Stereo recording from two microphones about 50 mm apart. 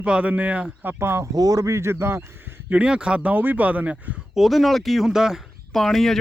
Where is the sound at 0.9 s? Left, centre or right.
Right.